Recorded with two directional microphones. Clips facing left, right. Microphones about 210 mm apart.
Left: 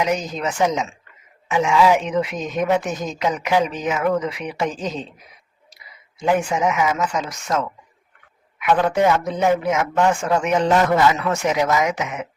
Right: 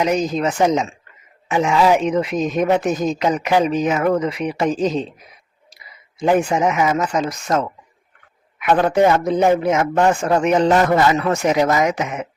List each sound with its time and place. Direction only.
0.0 s speech: 40° right (ahead or behind)
6.1 s speech: 35° right (ahead or behind)